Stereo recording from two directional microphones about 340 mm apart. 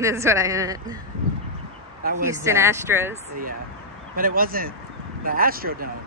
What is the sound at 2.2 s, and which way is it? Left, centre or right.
Speech, centre.